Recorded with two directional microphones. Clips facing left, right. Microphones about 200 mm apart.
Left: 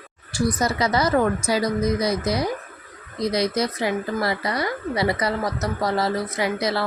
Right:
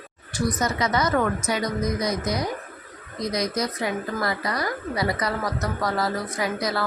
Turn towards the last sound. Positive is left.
turn(degrees=25)  # may be behind; listen again after turning